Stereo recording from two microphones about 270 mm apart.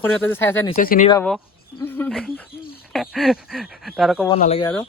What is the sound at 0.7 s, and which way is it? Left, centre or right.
Speech, left.